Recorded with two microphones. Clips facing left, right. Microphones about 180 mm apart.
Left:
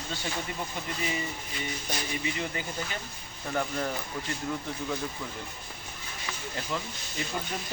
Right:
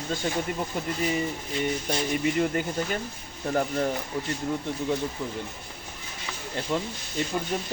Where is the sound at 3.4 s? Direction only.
35° right (ahead or behind).